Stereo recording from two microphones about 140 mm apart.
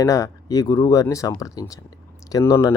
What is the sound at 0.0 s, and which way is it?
Speech, 25° left (ahead or behind).